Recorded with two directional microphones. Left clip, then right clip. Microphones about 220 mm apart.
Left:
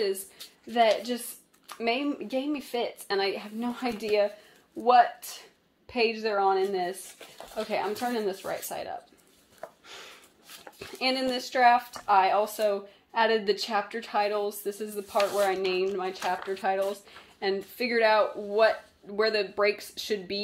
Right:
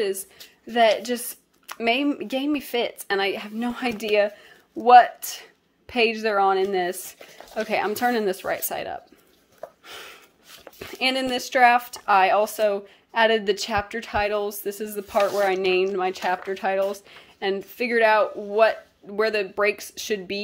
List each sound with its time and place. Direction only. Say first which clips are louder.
0.7 s a woman's voice: right 5 dB; 25° right (ahead or behind)
9.8 s a sound: right 5 dB; 30° right (ahead or behind)
10.6 s speech: right 5 dB; 35° right (ahead or behind)